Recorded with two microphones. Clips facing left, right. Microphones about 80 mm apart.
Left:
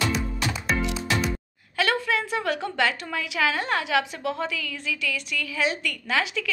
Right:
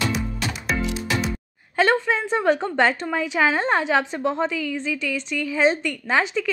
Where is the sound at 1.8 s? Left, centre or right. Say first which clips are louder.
Right 5 dB; right.